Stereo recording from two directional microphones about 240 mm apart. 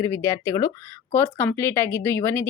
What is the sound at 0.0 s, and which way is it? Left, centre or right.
Speech, centre.